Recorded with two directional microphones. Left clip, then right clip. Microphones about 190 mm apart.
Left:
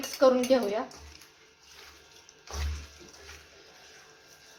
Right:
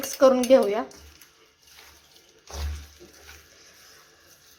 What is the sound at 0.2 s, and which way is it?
Speech, 40° right (ahead or behind).